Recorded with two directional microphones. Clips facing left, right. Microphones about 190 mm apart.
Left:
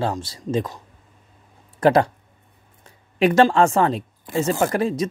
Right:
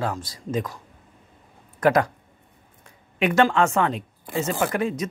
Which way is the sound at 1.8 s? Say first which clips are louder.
Left 3 dB; 30° left (ahead or behind).